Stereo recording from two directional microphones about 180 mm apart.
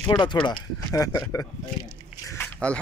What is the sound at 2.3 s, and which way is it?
Biting, 5° left (ahead or behind).